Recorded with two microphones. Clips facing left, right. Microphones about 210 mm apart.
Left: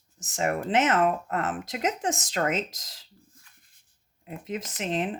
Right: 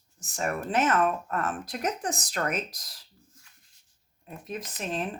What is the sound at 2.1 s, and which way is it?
Speech, 90° left.